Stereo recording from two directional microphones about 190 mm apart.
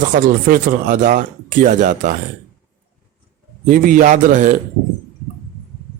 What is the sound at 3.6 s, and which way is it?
Speech, 45° right (ahead or behind).